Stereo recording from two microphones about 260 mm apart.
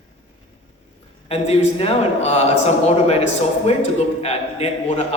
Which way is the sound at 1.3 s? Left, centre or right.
Left.